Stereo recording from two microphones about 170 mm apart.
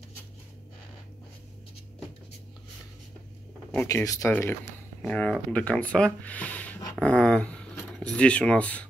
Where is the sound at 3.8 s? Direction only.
20° left (ahead or behind).